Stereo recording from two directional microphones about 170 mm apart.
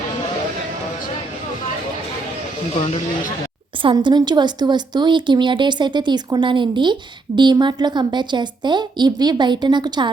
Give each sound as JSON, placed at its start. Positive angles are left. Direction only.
{"t": 3.8, "sound": "speech", "side_deg": -25}